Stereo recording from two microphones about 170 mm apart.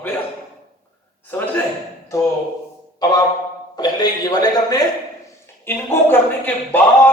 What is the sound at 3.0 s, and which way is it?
A man's voice, 25° left (ahead or behind).